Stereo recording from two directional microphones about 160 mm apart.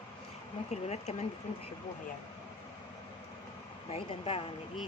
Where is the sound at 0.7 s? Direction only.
45° left (ahead or behind).